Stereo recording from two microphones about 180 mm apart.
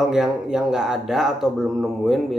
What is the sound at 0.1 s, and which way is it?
Speech, 5° right (ahead or behind).